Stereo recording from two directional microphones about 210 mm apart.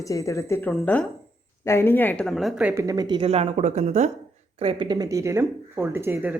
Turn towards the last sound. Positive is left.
turn(degrees=-10)  # may be behind; listen again after turning